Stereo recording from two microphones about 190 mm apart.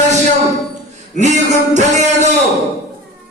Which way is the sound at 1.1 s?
40° right (ahead or behind).